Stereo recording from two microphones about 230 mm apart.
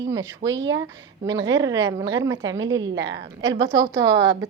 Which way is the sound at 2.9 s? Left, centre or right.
Right.